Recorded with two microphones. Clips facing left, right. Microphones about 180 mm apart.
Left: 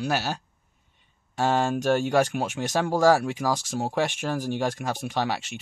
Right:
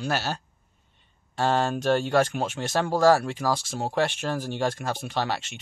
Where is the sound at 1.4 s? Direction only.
10° left (ahead or behind).